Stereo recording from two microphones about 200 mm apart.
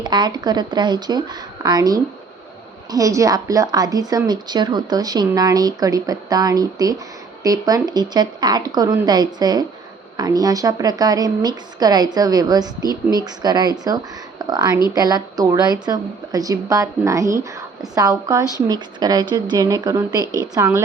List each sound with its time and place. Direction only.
0.0 s a woman's voice: 20° right (ahead or behind)